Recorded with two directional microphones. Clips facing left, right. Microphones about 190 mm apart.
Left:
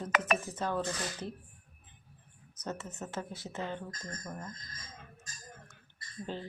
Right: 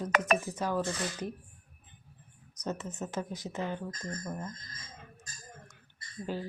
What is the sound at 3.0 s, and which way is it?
Speech, 15° right (ahead or behind).